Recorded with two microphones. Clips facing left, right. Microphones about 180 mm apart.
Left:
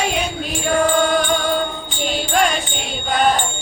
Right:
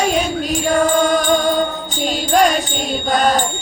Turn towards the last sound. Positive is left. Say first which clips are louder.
# right 2 dB
turn(degrees=-40)  # may be behind; listen again after turning